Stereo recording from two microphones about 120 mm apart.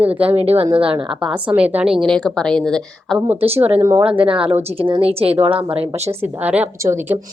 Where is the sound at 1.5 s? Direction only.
10° right (ahead or behind).